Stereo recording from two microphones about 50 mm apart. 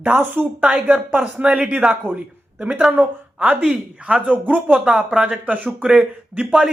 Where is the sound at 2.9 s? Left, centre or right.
Right.